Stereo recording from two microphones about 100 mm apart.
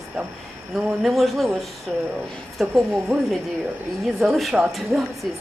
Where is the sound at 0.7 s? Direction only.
Centre (ahead or behind).